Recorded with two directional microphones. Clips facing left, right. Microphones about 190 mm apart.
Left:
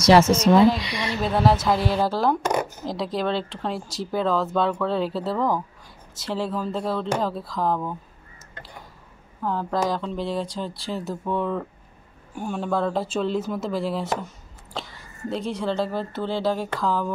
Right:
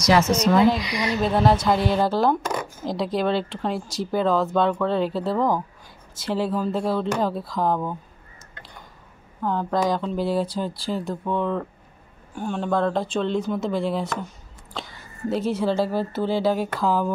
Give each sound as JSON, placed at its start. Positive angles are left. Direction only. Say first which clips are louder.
{"t": 0.0, "sound": "speech", "louder": "left 3 dB", "side_deg": 25}
{"t": 1.2, "sound": "speech", "louder": "even", "side_deg": 0}
{"t": 9.4, "sound": "speech", "louder": "right 2 dB", "side_deg": 0}